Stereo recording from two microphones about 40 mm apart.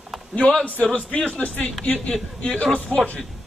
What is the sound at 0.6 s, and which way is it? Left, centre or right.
A man's voice, left.